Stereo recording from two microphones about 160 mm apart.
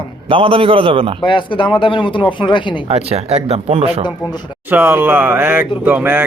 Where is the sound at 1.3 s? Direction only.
30° left (ahead or behind).